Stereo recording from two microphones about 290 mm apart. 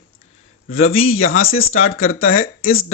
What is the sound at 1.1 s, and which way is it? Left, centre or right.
Speech, left.